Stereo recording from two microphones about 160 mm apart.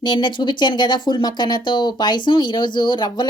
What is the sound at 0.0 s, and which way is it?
Speech, 25° left (ahead or behind).